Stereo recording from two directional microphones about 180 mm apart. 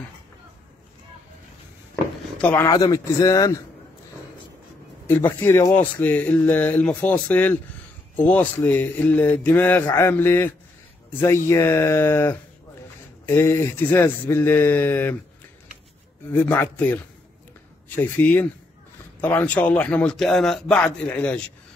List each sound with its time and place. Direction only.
2.3 s a man's voice: 10° left (ahead or behind)
5.4 s a man's voice: 15° left (ahead or behind)
16.3 s a man's voice: 10° left (ahead or behind)